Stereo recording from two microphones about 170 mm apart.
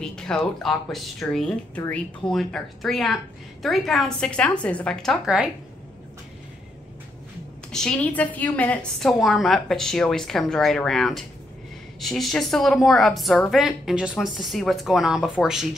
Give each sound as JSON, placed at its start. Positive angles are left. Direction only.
{"t": 0.0, "sound": "a woman's voice", "side_deg": 5}
{"t": 7.7, "sound": "a woman's voice", "side_deg": 5}